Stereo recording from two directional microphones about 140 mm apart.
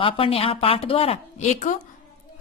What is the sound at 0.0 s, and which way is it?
A woman's voice, 40° left (ahead or behind).